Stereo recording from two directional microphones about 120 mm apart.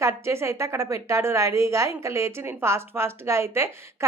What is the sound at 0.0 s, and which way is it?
A woman's voice, 25° right (ahead or behind).